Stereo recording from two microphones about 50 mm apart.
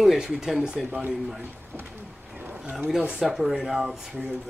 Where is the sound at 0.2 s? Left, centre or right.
Centre.